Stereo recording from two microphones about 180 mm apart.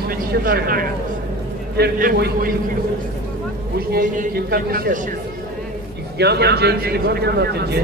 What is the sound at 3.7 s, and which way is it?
A man's voice, 50° right (ahead or behind).